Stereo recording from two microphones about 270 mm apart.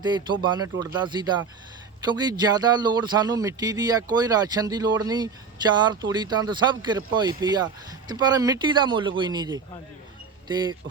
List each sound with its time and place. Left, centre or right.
0.0 s speech: centre